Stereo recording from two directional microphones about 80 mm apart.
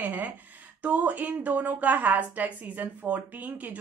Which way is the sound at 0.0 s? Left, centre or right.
Right.